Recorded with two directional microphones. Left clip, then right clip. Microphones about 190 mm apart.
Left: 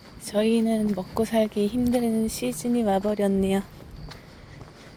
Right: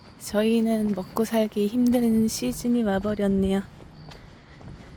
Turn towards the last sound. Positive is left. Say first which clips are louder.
# left 1 dB
turn(degrees=-15)  # may be behind; listen again after turning